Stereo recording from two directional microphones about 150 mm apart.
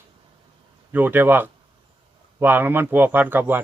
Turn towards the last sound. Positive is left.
turn(degrees=-15)  # may be behind; listen again after turning